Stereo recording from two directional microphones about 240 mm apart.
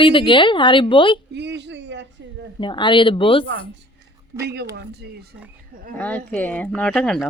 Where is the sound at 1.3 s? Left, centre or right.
Right.